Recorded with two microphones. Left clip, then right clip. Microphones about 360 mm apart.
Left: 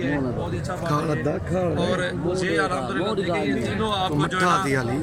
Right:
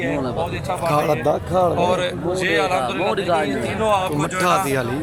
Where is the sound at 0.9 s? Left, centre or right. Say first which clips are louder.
Right 7 dB; centre.